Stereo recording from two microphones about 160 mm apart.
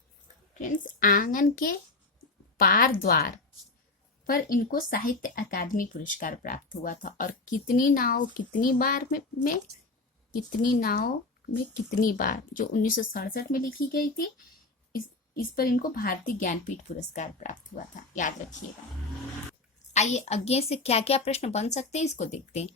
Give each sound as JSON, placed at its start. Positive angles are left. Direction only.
{"t": 0.6, "sound": "speech", "side_deg": 55}
{"t": 10.6, "sound": "speech", "side_deg": 65}
{"t": 15.5, "sound": "a woman's voice", "side_deg": 60}
{"t": 19.9, "sound": "a woman's voice", "side_deg": 45}